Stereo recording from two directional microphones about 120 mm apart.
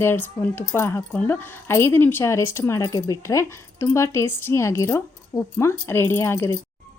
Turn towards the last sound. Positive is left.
turn(degrees=20)  # may be behind; listen again after turning